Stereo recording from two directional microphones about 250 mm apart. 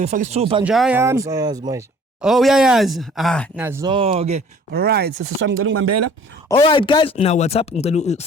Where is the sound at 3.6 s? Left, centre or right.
Centre.